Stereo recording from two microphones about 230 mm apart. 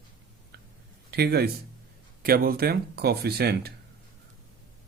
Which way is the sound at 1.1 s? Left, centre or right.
Right.